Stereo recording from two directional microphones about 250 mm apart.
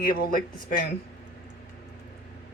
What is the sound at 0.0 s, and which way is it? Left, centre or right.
Speech, left.